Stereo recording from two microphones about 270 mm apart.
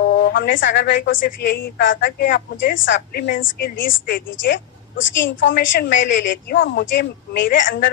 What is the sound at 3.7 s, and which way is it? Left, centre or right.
Speech, left.